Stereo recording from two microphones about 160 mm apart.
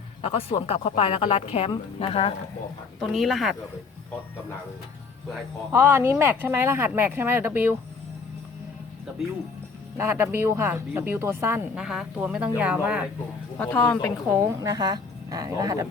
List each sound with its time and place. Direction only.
0.2 s a woman's voice: 40° left (ahead or behind)
3.0 s speech: centre (ahead or behind)
5.7 s a woman's voice: 15° right (ahead or behind)
10.0 s a woman's voice: 15° right (ahead or behind)
13.6 s speech: 10° left (ahead or behind)
14.3 s a woman's voice: 15° right (ahead or behind)